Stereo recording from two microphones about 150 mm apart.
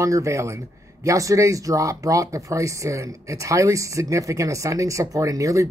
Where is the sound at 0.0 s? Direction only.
20° right (ahead or behind).